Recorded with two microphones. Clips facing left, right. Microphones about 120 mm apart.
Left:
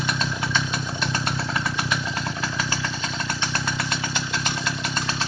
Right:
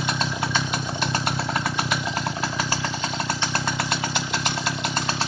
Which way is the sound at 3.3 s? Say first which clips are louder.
Right 2 dB; 35° right (ahead or behind).